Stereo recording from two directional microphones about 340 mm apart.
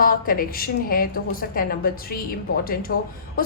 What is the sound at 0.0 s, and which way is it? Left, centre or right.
A woman's voice, left.